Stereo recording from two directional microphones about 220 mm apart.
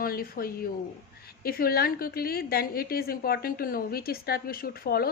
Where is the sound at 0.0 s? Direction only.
40° left (ahead or behind).